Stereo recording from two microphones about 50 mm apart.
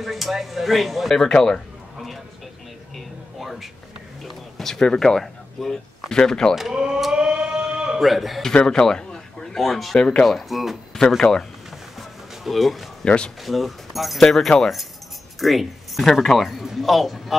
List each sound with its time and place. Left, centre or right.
0.0 s speech: centre
1.1 s speech: centre
3.3 s a sound: centre
4.8 s speech: centre
6.7 s speech: centre
7.2 s a sound: centre
8.0 s speech: centre
8.6 s speech: centre
9.9 s speech: centre
10.2 s speech: centre
11.0 s speech: centre
12.0 s music: centre
13.0 s a man's voice: centre
13.4 s speech: centre